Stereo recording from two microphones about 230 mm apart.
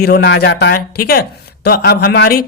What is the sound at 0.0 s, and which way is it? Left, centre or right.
Speech, left.